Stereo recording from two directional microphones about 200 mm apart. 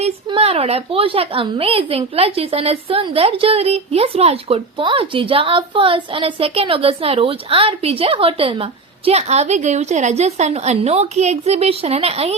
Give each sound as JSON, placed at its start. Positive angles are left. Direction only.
{"t": 0.0, "sound": "a woman's voice", "side_deg": -30}